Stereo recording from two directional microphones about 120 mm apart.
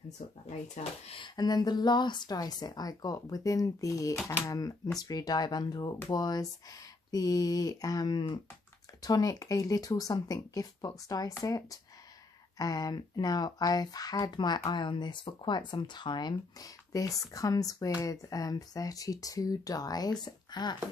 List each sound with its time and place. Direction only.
0.5 s speech: 70° left (ahead or behind)
1.1 s speech: 40° left (ahead or behind)